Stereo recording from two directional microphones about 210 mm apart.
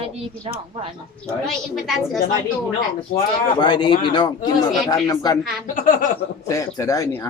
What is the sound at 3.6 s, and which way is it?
Speech, 20° left (ahead or behind).